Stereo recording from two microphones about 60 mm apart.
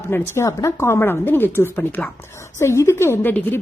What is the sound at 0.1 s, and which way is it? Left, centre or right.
Speech, left.